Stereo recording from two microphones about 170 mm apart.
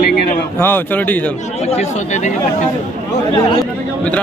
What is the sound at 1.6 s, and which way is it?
Speech, 40° left (ahead or behind).